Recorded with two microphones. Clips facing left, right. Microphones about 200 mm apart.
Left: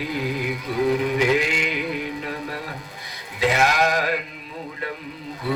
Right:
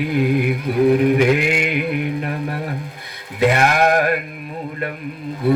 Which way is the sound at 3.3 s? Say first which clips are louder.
Right 4 dB; 55° right (ahead or behind).